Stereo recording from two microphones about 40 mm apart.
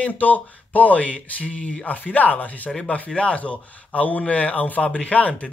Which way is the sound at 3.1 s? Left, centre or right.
Left.